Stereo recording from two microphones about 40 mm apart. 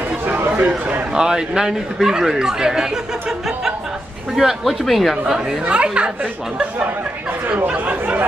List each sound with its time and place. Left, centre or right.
1.1 s speech: centre
4.8 s speech: centre
5.7 s a woman's voice: right
7.4 s speech: right